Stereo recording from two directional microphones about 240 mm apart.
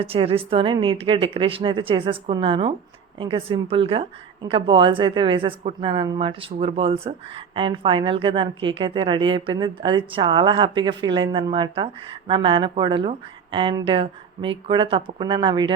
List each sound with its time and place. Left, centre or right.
0.0 s a woman's voice: right